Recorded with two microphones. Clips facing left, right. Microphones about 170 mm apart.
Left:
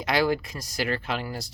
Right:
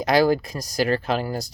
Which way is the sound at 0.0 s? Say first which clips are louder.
Right 6 dB; 40° right (ahead or behind).